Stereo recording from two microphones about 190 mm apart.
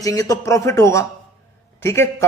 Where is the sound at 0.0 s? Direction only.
20° left (ahead or behind).